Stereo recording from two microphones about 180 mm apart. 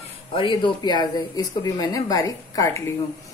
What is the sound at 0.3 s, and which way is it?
Speech, 25° left (ahead or behind).